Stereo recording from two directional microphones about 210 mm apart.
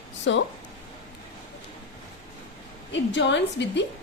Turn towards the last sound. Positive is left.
turn(degrees=55)  # may be behind; listen again after turning